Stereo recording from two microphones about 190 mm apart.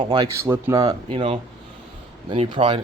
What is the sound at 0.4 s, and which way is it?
Speech, 10° right (ahead or behind).